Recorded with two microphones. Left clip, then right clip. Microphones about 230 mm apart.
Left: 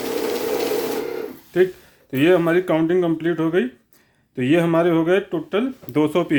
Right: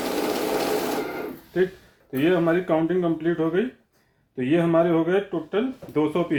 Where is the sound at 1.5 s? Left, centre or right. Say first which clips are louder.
Left 5 dB; left.